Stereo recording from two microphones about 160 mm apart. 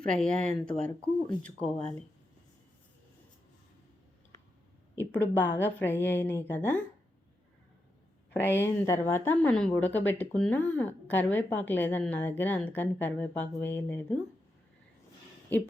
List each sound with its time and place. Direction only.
0.1 s speech: 5° left (ahead or behind)
4.9 s speech: 10° left (ahead or behind)
8.3 s speech: 15° left (ahead or behind)